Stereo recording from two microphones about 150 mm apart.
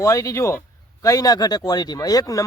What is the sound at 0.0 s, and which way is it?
Speech, 20° left (ahead or behind).